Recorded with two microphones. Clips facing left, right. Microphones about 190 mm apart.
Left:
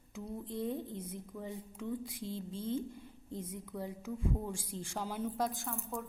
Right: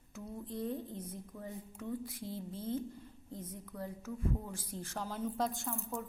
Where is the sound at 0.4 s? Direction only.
20° left (ahead or behind).